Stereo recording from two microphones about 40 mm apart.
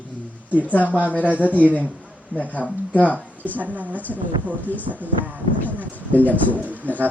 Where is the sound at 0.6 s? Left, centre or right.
Left.